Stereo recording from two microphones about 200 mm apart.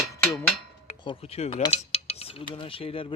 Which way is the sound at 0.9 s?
30° left (ahead or behind).